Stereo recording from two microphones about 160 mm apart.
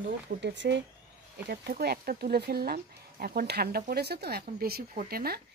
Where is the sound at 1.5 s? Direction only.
80° right.